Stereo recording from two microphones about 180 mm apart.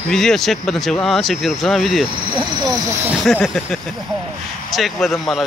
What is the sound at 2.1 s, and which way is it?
Speech, 25° right (ahead or behind).